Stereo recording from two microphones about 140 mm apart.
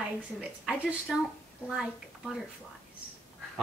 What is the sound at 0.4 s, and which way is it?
A woman's voice, 5° right (ahead or behind).